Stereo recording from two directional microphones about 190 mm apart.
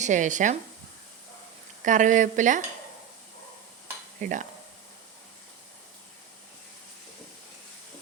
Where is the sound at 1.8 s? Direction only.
40° right (ahead or behind).